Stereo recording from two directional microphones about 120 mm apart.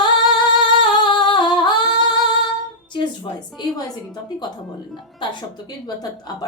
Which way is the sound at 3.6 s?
40° left (ahead or behind).